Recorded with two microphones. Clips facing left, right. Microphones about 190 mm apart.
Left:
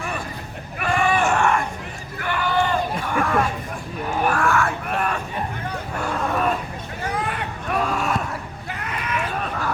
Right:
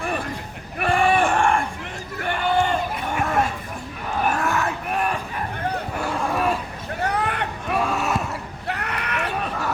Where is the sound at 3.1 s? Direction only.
25° right (ahead or behind).